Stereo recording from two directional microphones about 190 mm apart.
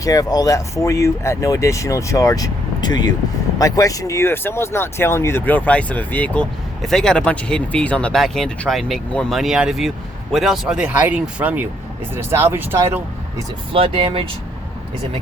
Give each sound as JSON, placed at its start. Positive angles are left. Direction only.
{"t": 0.0, "sound": "speech", "side_deg": 20}
{"t": 13.7, "sound": "speech", "side_deg": -30}